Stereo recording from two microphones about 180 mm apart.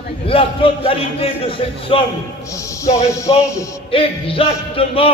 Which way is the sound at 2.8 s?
15° left (ahead or behind).